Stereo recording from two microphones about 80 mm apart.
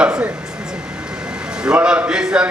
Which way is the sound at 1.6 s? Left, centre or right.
Centre.